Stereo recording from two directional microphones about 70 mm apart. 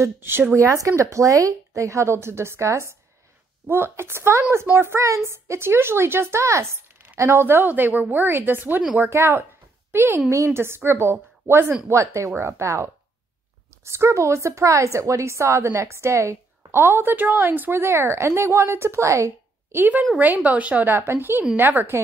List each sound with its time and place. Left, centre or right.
0.0 s a woman's voice: right
0.6 s a woman's voice: right
19.8 s a woman's voice: right